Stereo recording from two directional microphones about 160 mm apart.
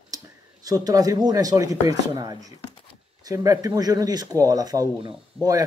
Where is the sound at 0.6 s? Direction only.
25° right (ahead or behind).